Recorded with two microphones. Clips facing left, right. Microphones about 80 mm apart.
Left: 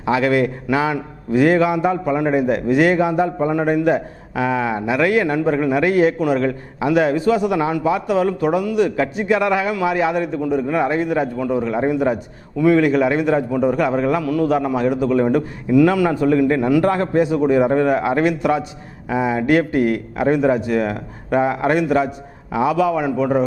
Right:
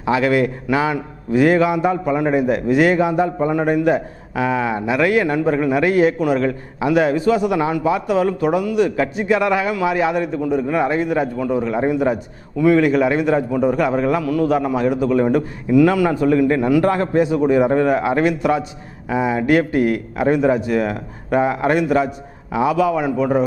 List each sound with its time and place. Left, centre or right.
0.0 s a man's voice: centre